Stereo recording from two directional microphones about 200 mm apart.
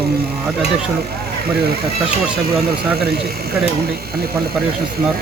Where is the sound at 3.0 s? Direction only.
50° right (ahead or behind).